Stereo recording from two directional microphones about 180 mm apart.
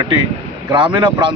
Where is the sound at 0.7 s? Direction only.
25° right (ahead or behind).